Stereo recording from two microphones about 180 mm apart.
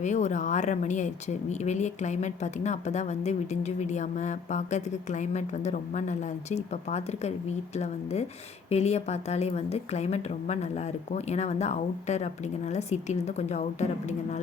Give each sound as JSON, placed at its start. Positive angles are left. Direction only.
{"t": 0.0, "sound": "speech", "side_deg": 40}
{"t": 8.7, "sound": "speech", "side_deg": 35}